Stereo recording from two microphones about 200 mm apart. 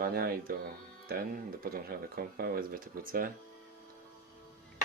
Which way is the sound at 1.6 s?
50° right (ahead or behind).